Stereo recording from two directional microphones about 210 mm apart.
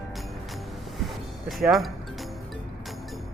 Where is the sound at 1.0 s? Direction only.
Centre (ahead or behind).